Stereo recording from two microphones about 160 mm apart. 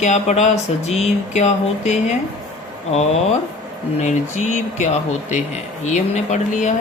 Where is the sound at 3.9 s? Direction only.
45° left (ahead or behind).